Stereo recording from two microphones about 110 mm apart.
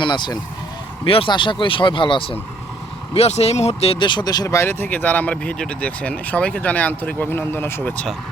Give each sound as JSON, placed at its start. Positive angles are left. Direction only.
{"t": 0.0, "sound": "speech", "side_deg": 45}
{"t": 1.0, "sound": "speech", "side_deg": 60}
{"t": 1.3, "sound": "speech", "side_deg": 50}
{"t": 3.2, "sound": "speech", "side_deg": 75}
{"t": 4.4, "sound": "speech", "side_deg": 25}